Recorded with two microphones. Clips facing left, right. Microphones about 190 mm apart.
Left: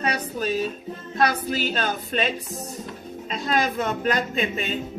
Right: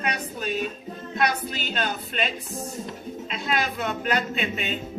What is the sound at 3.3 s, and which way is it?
Speech, 40° left (ahead or behind).